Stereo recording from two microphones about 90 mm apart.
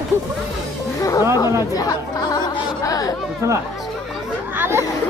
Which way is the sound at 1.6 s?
40° left (ahead or behind).